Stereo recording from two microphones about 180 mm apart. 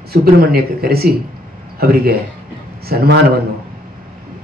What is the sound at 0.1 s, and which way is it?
Speech, 60° right (ahead or behind).